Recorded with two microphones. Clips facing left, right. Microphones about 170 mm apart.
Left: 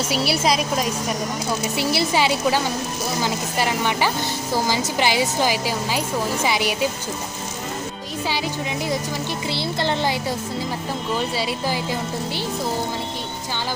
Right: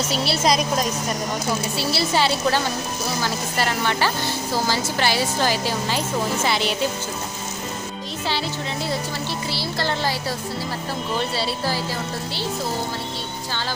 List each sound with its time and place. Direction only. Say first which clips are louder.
0.1 s speech: even; 10° left (ahead or behind)
9.5 s a child's voice: left 3 dB; 20° left (ahead or behind)
11.3 s speech: left 1 dB; 15° left (ahead or behind)